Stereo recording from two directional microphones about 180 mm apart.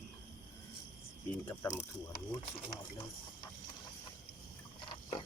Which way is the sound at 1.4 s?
15° left (ahead or behind).